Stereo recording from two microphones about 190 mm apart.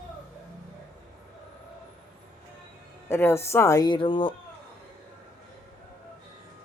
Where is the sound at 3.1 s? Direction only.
15° left (ahead or behind).